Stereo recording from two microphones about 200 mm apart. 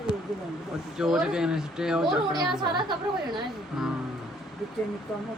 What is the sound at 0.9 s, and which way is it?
Speech, centre (ahead or behind).